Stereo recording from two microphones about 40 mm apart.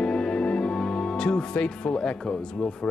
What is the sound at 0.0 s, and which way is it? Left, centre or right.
Speech, left.